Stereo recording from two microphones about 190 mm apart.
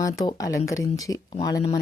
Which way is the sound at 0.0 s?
20° left (ahead or behind).